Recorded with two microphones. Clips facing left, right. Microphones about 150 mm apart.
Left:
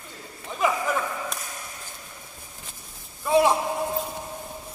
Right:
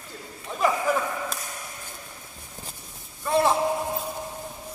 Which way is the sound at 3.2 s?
5° left (ahead or behind).